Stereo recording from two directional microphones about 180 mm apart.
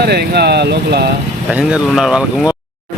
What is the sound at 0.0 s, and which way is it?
Speech, 60° right (ahead or behind).